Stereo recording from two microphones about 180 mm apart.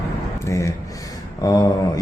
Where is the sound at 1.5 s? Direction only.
20° left (ahead or behind).